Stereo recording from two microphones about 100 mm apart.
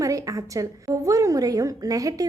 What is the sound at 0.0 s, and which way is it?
A woman's voice, 35° right (ahead or behind).